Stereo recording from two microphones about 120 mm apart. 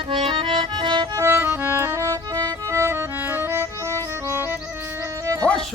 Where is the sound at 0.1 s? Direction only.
45° right (ahead or behind).